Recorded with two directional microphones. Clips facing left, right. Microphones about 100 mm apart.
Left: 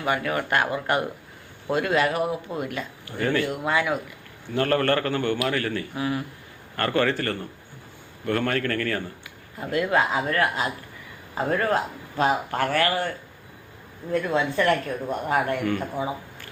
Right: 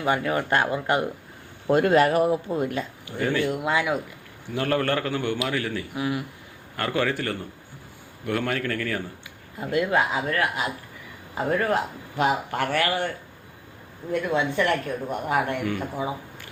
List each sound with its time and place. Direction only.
0.0 s speech: 25° right (ahead or behind)
1.7 s speech: 40° right (ahead or behind)
3.1 s speech: 15° right (ahead or behind)
11.7 s speech: 15° right (ahead or behind)